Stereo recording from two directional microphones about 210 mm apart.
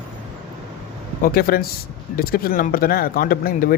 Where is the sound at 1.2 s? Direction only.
45° left (ahead or behind).